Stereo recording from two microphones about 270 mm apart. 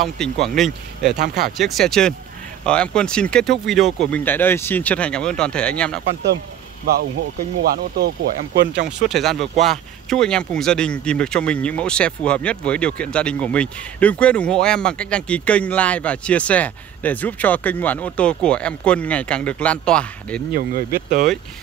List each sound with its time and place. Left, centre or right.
0.0 s speech: centre
1.1 s speech: right
1.6 s speech: centre
7.6 s speech: right
9.1 s speech: centre
20.5 s speech: right